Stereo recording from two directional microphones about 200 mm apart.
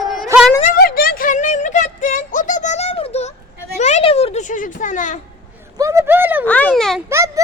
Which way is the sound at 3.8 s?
35° left (ahead or behind).